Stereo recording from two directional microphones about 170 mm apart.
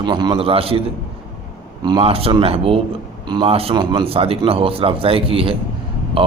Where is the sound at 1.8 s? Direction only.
30° right (ahead or behind).